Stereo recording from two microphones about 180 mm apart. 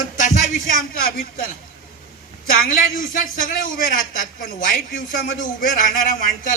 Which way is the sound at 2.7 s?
50° left (ahead or behind).